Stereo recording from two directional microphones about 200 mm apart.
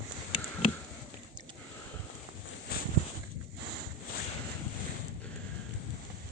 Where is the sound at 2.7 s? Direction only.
50° left (ahead or behind).